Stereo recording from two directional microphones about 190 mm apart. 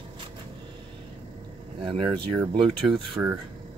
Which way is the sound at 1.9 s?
25° right (ahead or behind).